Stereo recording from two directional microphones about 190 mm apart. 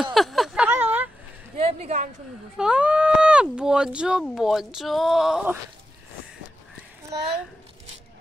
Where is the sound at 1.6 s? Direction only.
30° right (ahead or behind).